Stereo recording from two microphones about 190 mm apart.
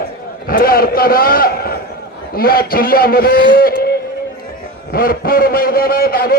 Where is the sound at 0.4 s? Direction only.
50° left (ahead or behind).